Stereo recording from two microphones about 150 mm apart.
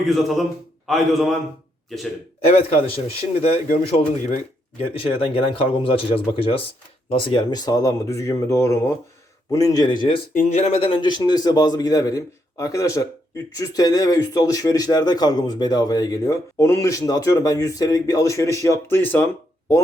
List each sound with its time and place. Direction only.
0.0 s a man's voice: centre (ahead or behind)
2.5 s a man's voice: 40° left (ahead or behind)
4.8 s a man's voice: 40° left (ahead or behind)
10.3 s speech: 45° left (ahead or behind); by 19.8 s 15° left (ahead or behind)